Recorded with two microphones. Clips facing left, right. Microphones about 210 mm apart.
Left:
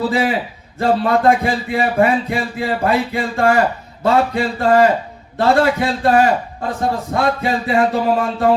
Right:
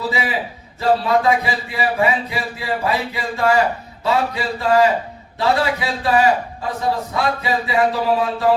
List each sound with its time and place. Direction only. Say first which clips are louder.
0.1 s speech: left 5 dB; 50° left (ahead or behind)